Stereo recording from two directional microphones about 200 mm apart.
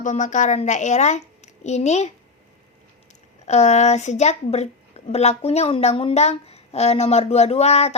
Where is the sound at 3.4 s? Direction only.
35° left (ahead or behind).